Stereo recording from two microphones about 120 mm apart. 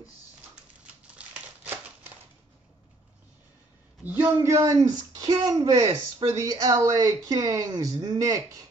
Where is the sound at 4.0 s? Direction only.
15° right (ahead or behind).